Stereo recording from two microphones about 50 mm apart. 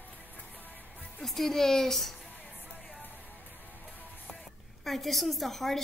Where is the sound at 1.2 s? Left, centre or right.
Centre.